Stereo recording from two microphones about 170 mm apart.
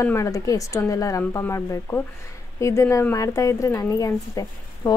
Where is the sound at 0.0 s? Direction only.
15° left (ahead or behind).